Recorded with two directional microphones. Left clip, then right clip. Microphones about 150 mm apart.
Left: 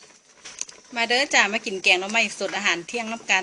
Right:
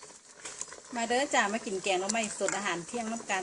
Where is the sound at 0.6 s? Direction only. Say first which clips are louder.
Left 9 dB; 15° left (ahead or behind).